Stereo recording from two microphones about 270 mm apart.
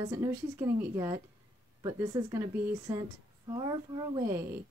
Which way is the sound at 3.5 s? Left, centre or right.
Centre.